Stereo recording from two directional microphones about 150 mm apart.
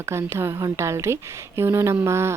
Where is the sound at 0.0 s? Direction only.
15° right (ahead or behind).